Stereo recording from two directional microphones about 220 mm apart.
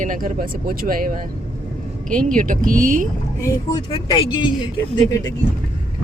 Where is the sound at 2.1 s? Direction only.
5° left (ahead or behind).